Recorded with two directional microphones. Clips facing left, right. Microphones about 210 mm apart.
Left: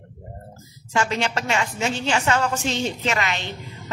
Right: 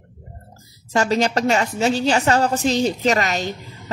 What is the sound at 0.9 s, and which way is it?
A woman's voice, 40° right (ahead or behind).